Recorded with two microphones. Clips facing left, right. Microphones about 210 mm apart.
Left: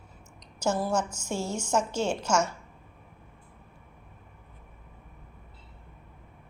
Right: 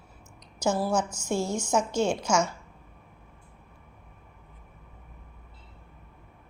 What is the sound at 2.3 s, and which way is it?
Speech, 5° left (ahead or behind).